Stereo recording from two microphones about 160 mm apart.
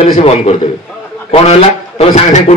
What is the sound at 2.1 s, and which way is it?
Speech, 45° left (ahead or behind).